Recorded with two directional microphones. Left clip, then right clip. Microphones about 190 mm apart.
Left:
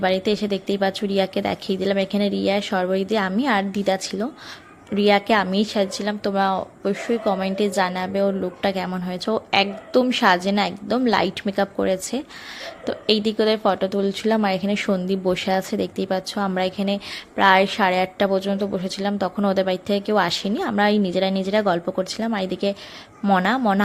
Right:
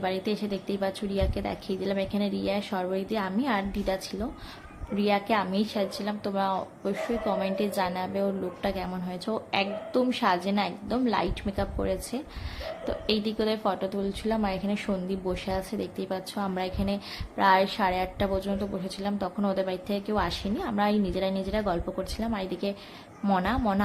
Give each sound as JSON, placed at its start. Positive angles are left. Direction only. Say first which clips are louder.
{"t": 0.0, "sound": "speech", "louder": "left 9 dB", "side_deg": 35}